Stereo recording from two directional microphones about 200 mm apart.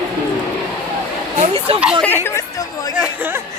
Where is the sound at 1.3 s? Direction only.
30° right (ahead or behind).